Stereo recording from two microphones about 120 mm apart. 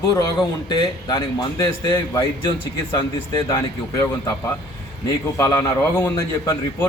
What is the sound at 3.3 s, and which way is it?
Speech, 30° left (ahead or behind).